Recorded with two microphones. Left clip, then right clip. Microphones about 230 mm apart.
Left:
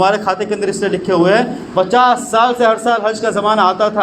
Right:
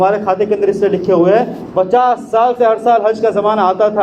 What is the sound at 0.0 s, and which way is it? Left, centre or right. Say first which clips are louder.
A man's voice: right 1 dB; left.